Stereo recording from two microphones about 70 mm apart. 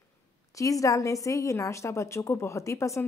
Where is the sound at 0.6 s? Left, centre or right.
Left.